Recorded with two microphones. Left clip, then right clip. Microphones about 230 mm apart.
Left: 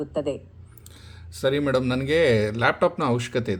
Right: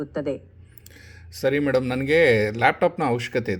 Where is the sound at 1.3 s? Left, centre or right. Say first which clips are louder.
Right 1 dB; centre.